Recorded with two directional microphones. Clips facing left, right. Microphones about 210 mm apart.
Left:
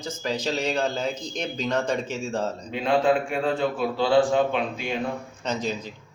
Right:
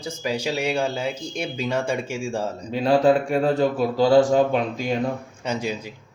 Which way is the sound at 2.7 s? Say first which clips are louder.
Right 4 dB; 35° right (ahead or behind).